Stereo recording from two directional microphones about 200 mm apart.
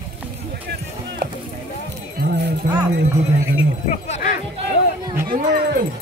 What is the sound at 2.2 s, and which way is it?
Jingle bell, 55° right (ahead or behind).